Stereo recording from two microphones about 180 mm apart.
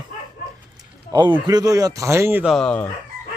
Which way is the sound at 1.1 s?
25° right (ahead or behind).